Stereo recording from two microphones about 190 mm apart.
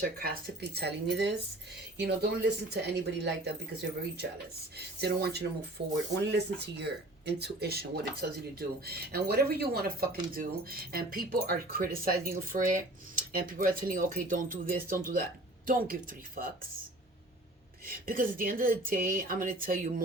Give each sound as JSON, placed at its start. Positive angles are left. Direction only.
{"t": 0.0, "sound": "speech", "side_deg": -50}
{"t": 17.8, "sound": "speech", "side_deg": -50}